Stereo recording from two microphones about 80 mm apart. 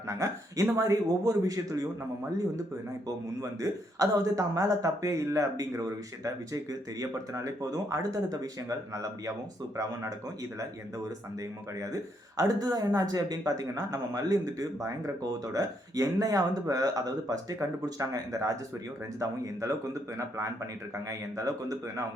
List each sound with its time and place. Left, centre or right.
0.1 s speech: right
3.4 s speech: right
12.4 s speech: right